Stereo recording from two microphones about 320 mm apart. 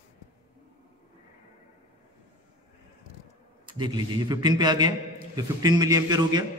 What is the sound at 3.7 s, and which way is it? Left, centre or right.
A man's voice, centre.